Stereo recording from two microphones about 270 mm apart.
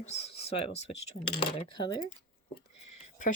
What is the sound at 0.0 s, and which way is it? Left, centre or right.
Speech, left.